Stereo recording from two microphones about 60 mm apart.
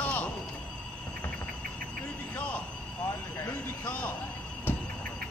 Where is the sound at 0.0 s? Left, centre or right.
Left.